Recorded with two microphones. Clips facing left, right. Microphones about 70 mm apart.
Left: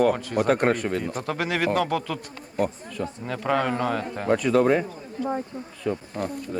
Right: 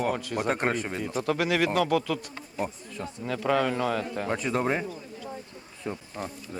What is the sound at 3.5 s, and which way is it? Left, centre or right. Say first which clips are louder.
Speech: left 2 dB; left.